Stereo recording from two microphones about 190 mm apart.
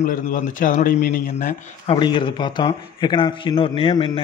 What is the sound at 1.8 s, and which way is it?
A man's voice, 25° left (ahead or behind).